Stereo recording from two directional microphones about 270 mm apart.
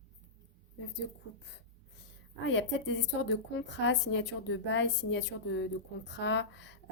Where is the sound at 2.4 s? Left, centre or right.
Left.